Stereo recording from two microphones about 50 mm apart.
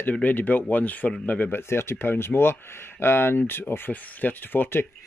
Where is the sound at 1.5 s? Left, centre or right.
Left.